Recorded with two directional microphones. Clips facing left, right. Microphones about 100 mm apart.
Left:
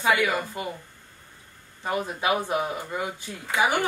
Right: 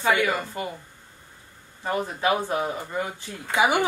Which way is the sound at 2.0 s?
30° right (ahead or behind).